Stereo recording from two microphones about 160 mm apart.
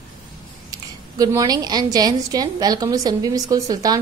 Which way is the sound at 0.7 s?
20° right (ahead or behind).